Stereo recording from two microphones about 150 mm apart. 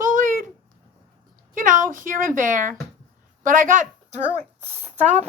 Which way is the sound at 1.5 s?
60° right (ahead or behind).